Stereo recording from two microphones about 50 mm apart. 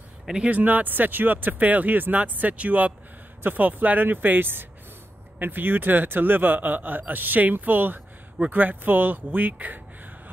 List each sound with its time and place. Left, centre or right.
0.5 s speech: right